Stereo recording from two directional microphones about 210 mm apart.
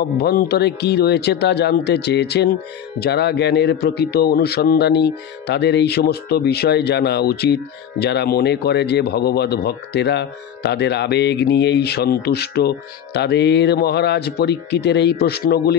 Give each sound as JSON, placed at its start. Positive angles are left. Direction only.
{"t": 0.2, "sound": "a man's voice", "side_deg": 50}